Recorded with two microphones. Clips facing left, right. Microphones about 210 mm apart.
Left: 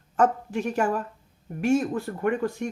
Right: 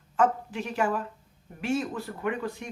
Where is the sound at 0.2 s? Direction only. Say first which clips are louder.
Left 3 dB; 45° left (ahead or behind).